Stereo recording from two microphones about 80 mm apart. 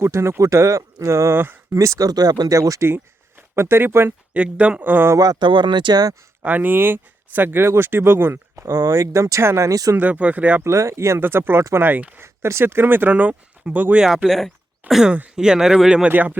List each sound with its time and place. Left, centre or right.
0.0 s speech: right
1.8 s speech: right
4.4 s speech: centre
5.1 s speech: right
5.4 s speech: right
6.4 s speech: right
8.7 s speech: right
10.0 s speech: centre
10.6 s speech: right; by 14.0 s centre
14.3 s speech: centre
15.1 s speech: centre
16.0 s speech: right